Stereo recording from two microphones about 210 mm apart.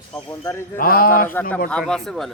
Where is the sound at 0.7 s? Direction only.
45° left (ahead or behind).